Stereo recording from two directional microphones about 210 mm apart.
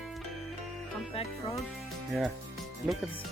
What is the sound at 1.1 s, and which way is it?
Music, 25° left (ahead or behind).